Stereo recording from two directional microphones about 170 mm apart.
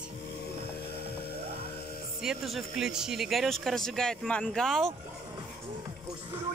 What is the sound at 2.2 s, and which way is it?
Speech, centre (ahead or behind).